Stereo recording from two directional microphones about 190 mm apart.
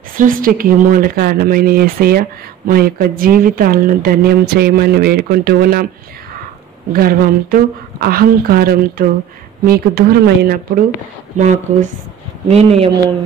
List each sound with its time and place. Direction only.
0.2 s speech: 45° right (ahead or behind)
6.9 s speech: 50° right (ahead or behind)
11.3 s speech: 40° right (ahead or behind)